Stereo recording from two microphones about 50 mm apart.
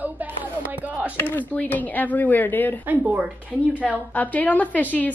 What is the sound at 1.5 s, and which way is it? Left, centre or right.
A woman's voice, left.